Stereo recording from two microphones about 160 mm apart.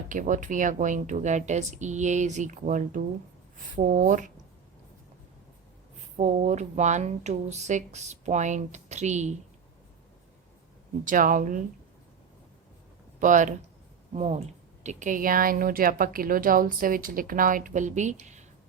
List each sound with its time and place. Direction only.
0.1 s speech: 55° right (ahead or behind)
6.1 s speech: 50° right (ahead or behind)
11.0 s speech: 55° right (ahead or behind)
13.1 s speech: 50° right (ahead or behind)
14.1 s speech: 40° right (ahead or behind)
14.8 s speech: 50° right (ahead or behind)